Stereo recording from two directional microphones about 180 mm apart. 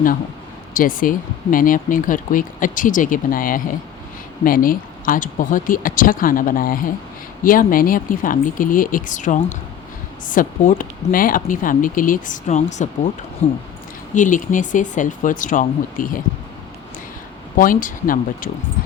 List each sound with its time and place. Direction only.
0.7 s speech: 50° left (ahead or behind)
17.6 s speech: 50° left (ahead or behind)